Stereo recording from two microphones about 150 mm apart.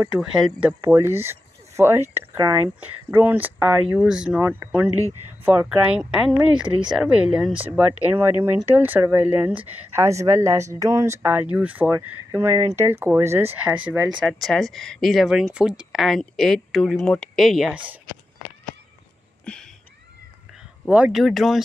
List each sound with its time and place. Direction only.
0.1 s speech: 5° right (ahead or behind)
14.2 s speech: centre (ahead or behind)
19.4 s a sound: 5° left (ahead or behind)
20.9 s speech: 5° right (ahead or behind)